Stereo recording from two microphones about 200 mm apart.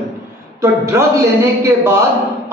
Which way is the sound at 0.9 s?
15° right (ahead or behind).